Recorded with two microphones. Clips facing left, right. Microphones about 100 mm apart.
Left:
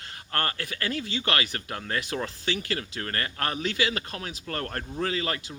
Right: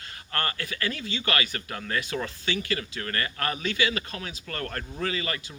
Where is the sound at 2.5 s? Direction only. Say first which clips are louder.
Right 1 dB; 45° left (ahead or behind).